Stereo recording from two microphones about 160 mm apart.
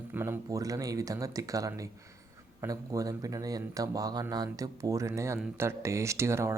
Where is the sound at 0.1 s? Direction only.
15° right (ahead or behind).